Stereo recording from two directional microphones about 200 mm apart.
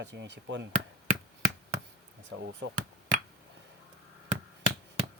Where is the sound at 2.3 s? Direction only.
75° right (ahead or behind).